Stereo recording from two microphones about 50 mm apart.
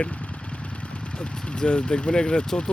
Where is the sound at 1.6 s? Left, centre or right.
Left.